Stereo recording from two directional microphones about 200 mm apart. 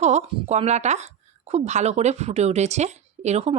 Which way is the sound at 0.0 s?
35° right (ahead or behind).